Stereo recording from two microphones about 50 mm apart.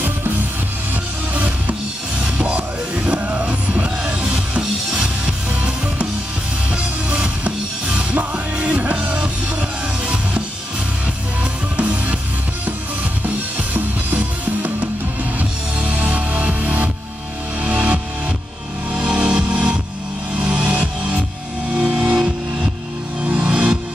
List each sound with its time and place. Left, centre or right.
1.3 s music: right
6.7 s music: right
11.7 s music: right
13.7 s music: right